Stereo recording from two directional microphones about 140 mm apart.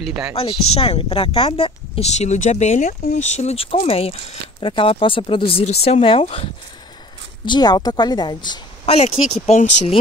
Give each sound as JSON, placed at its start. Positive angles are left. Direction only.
{"t": 0.3, "sound": "speech", "side_deg": 45}
{"t": 7.4, "sound": "speech", "side_deg": 30}
{"t": 8.8, "sound": "speech", "side_deg": 50}